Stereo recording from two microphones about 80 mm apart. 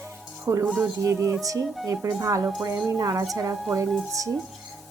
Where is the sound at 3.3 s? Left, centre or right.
Right.